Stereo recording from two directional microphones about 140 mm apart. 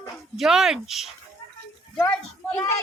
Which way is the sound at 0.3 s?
5° right (ahead or behind).